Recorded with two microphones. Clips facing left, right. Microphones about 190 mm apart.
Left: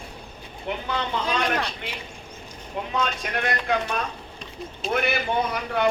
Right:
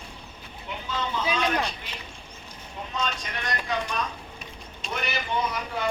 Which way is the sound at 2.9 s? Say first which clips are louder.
Left 4 dB; 60° left (ahead or behind).